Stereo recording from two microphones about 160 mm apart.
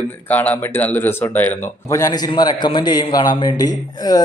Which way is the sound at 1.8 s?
20° left (ahead or behind).